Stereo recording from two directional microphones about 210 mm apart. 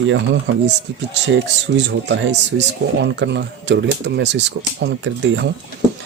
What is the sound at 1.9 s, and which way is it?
A man's voice, 55° right (ahead or behind).